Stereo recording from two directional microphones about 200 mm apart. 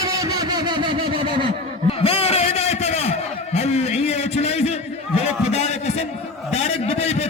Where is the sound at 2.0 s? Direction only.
30° left (ahead or behind).